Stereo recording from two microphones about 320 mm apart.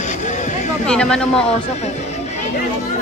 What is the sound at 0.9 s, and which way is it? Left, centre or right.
Speech, centre.